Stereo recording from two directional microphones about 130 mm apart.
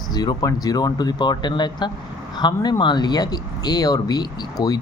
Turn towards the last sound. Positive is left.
turn(degrees=30)  # may be behind; listen again after turning